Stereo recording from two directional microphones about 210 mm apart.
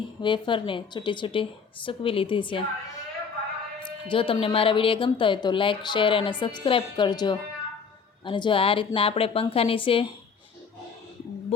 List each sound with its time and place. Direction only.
0.2 s a woman's voice: 25° left (ahead or behind)
4.1 s a woman's voice: 25° left (ahead or behind)